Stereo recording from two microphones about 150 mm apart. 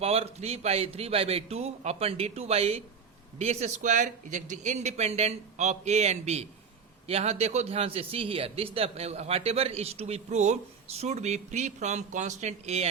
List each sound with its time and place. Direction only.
0.0 s a man's voice: 40° right (ahead or behind)